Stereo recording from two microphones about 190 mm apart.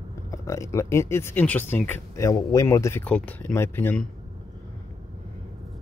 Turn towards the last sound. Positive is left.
turn(degrees=10)  # may be behind; listen again after turning